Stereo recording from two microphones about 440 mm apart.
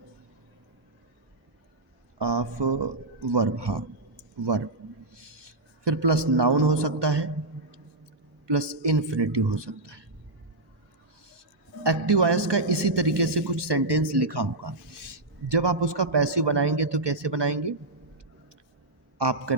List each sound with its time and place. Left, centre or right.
2.1 s a man's voice: right
8.4 s a man's voice: right
11.3 s a man's voice: right
19.2 s a man's voice: right